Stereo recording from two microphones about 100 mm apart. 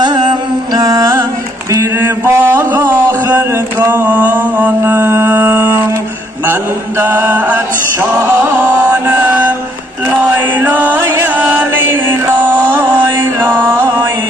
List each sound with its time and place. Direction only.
0.0 s music: 50° right (ahead or behind)
1.7 s mantra: 25° right (ahead or behind)
6.4 s music: 20° right (ahead or behind)
10.0 s chant: 20° right (ahead or behind)
13.4 s chant: 25° right (ahead or behind)